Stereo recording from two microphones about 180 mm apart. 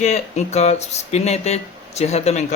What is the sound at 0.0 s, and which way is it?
A man's voice, 40° left (ahead or behind).